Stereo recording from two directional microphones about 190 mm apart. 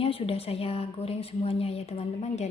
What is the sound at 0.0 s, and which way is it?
A woman's voice, 30° left (ahead or behind).